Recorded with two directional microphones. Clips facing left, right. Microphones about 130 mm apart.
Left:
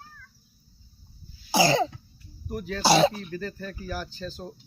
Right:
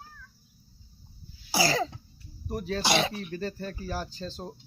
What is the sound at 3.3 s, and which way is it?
Speech, 30° right (ahead or behind).